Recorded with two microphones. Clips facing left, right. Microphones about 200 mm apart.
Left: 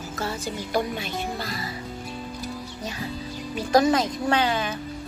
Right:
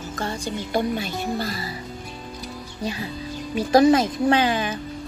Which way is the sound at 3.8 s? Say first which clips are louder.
Right 5 dB; 25° right (ahead or behind).